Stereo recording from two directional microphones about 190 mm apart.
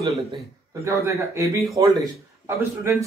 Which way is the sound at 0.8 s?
15° right (ahead or behind).